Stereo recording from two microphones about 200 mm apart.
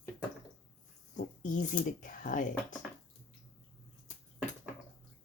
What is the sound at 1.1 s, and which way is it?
Speech, 40° left (ahead or behind).